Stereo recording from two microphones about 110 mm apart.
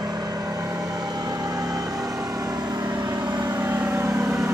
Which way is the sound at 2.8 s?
35° right (ahead or behind).